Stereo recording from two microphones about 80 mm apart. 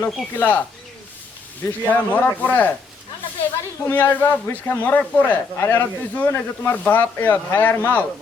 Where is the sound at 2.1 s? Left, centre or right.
Centre.